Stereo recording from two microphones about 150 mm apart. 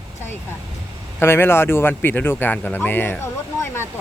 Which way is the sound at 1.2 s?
15° left (ahead or behind).